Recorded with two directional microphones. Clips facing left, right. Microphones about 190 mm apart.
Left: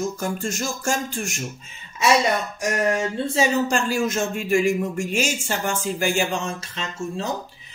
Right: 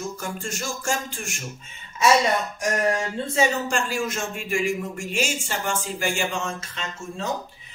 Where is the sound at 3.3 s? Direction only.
40° left (ahead or behind).